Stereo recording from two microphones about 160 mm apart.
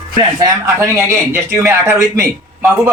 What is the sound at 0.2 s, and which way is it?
Speech, 20° right (ahead or behind).